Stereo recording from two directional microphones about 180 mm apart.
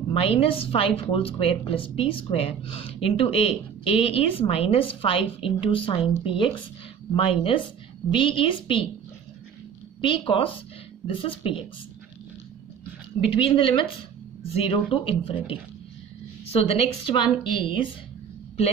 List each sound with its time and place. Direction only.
0.1 s a woman's voice: 30° left (ahead or behind)
10.0 s a woman's voice: 30° left (ahead or behind)
13.3 s a woman's voice: 30° left (ahead or behind)
16.5 s a woman's voice: 30° left (ahead or behind)